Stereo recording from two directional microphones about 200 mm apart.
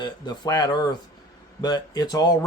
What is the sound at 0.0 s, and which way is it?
A man's voice, 20° left (ahead or behind).